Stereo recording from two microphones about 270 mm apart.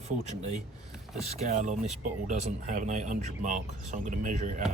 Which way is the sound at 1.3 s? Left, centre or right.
Right.